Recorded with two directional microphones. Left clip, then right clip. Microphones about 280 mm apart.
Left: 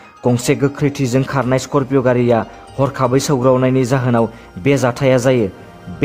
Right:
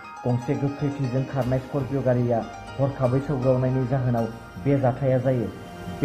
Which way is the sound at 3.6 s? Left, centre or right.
Left.